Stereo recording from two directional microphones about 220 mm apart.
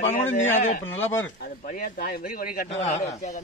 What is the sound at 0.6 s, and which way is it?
A man's voice, 35° left (ahead or behind).